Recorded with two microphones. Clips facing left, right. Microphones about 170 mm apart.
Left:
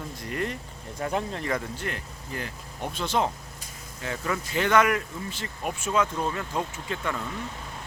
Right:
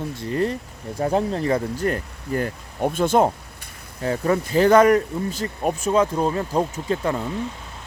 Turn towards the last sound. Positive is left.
turn(degrees=-35)  # may be behind; listen again after turning